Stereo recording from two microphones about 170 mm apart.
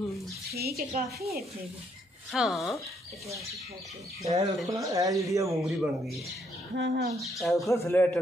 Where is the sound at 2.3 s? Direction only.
Centre (ahead or behind).